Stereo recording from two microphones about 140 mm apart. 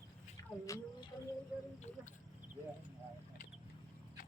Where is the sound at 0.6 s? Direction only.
25° left (ahead or behind).